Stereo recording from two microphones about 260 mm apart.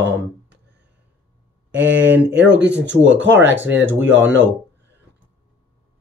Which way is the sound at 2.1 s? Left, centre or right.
Centre.